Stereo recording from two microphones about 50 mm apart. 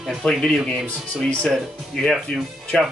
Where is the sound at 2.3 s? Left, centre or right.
Centre.